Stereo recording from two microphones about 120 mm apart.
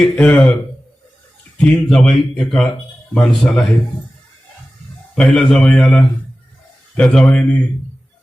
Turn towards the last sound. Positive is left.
turn(degrees=10)  # may be behind; listen again after turning